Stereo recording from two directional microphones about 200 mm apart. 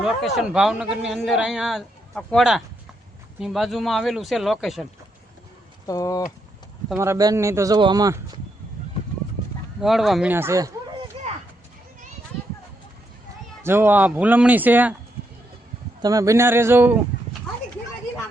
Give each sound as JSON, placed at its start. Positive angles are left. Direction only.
{"t": 0.3, "sound": "a man's voice", "side_deg": -5}
{"t": 5.8, "sound": "speech", "side_deg": 15}
{"t": 6.9, "sound": "speech", "side_deg": -15}
{"t": 9.8, "sound": "a man's voice", "side_deg": 0}
{"t": 13.6, "sound": "speech", "side_deg": -10}
{"t": 16.0, "sound": "speech", "side_deg": -15}